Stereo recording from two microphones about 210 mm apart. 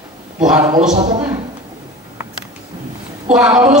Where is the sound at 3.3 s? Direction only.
5° right (ahead or behind).